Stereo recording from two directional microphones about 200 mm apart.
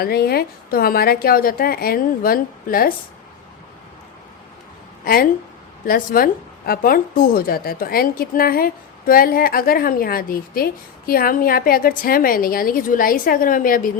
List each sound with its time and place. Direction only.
0.0 s a woman's voice: 50° left (ahead or behind)
5.0 s a woman's voice: 50° left (ahead or behind)